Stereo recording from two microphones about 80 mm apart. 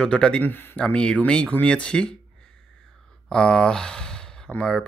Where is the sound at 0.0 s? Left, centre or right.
Centre.